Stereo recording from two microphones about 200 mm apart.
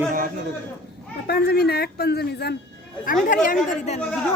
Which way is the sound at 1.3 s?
55° left (ahead or behind).